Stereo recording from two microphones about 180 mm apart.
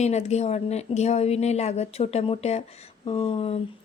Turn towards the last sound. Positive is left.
turn(degrees=35)  # may be behind; listen again after turning